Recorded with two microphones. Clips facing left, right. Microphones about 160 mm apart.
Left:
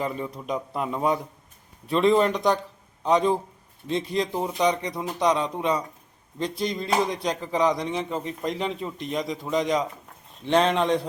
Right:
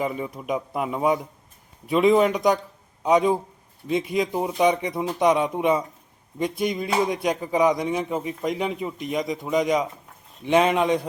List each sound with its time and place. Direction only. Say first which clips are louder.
0.0 s a man's voice: right 2 dB; 10° right (ahead or behind)
3.8 s a man's voice: right 2 dB; 10° right (ahead or behind)